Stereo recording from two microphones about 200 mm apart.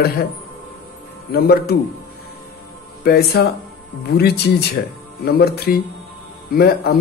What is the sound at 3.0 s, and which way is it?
Speech, 50° left (ahead or behind).